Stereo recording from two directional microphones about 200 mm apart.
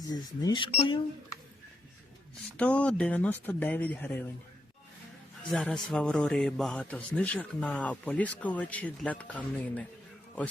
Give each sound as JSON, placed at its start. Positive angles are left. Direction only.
{"t": 0.1, "sound": "speech", "side_deg": 20}
{"t": 2.6, "sound": "a man's voice", "side_deg": 5}
{"t": 5.4, "sound": "a man's voice", "side_deg": 5}